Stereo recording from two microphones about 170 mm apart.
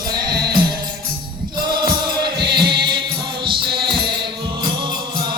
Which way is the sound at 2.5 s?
25° right (ahead or behind).